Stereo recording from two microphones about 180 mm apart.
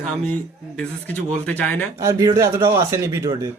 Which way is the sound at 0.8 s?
5° left (ahead or behind).